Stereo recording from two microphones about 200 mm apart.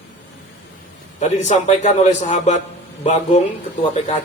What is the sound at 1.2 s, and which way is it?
Speech, 35° left (ahead or behind).